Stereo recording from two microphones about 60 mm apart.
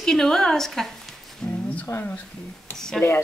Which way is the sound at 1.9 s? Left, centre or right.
Left.